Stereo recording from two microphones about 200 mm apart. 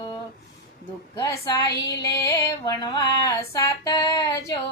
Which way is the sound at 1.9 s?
15° left (ahead or behind).